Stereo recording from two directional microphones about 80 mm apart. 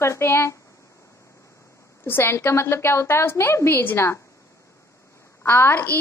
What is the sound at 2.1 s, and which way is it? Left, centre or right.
A woman's voice, left.